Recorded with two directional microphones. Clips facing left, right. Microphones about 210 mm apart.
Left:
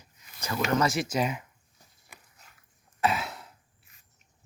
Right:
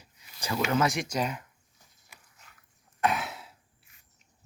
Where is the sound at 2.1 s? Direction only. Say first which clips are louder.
Left 4 dB; 55° left (ahead or behind).